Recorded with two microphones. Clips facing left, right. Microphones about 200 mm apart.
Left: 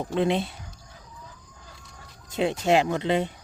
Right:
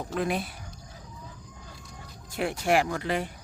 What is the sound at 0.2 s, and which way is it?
Speech, 25° left (ahead or behind).